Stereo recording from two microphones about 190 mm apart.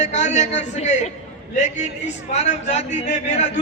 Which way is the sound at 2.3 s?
35° left (ahead or behind).